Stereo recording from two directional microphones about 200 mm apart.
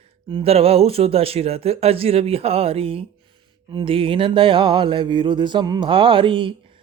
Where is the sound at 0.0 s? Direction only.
25° right (ahead or behind).